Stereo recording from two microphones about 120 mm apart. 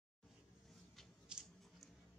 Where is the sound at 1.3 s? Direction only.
5° right (ahead or behind).